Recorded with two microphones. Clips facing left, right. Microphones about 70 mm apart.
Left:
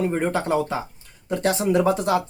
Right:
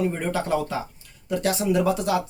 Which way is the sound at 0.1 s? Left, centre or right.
Left.